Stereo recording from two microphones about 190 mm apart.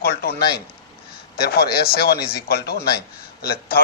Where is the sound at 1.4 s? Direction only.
55° left (ahead or behind).